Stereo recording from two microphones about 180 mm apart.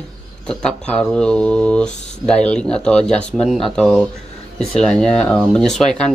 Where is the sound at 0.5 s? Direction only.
5° left (ahead or behind).